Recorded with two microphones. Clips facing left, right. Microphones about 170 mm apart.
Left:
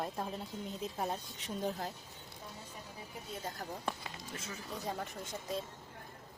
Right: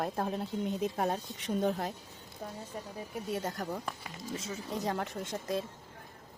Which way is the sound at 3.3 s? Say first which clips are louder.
Right 6 dB; 80° right.